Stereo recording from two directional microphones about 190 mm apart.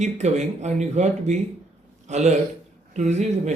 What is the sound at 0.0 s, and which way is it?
A man's voice, 35° right (ahead or behind).